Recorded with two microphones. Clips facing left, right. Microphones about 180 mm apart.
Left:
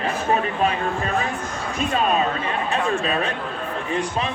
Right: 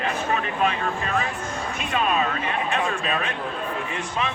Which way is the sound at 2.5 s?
35° left (ahead or behind).